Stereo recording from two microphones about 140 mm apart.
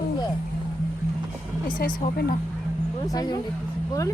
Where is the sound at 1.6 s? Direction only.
75° left (ahead or behind).